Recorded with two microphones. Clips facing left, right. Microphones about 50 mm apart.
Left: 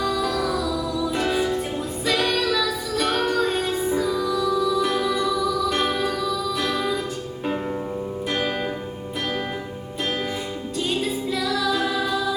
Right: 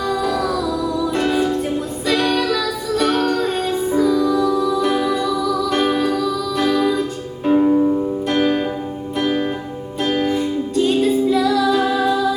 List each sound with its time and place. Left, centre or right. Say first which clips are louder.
0.2 s music: right 4 dB; centre
4.3 s music: right 4 dB; centre
4.8 s music: right 4 dB; centre